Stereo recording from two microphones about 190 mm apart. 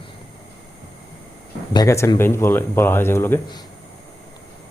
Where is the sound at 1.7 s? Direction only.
20° left (ahead or behind).